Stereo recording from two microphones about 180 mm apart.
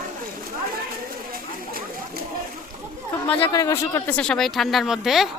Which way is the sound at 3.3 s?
15° left (ahead or behind).